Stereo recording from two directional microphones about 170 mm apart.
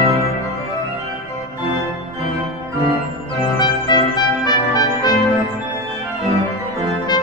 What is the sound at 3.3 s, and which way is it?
Music, 30° left (ahead or behind).